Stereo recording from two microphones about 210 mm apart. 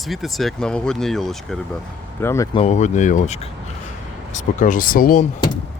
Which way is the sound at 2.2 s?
15° left (ahead or behind).